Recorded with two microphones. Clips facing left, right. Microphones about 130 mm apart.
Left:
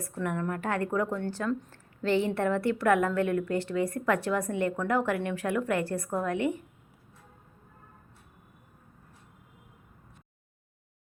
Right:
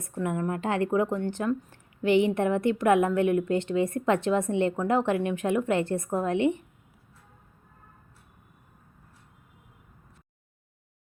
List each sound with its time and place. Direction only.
0.0 s a woman's voice: 20° right (ahead or behind)